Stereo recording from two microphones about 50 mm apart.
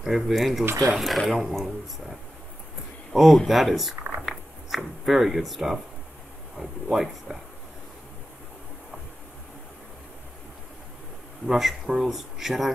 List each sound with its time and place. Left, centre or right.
0.0 s speech: centre
11.4 s speech: centre